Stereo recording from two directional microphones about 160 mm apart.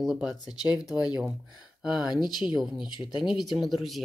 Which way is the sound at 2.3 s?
25° left (ahead or behind).